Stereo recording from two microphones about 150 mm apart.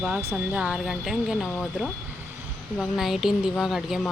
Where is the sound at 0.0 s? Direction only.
15° right (ahead or behind).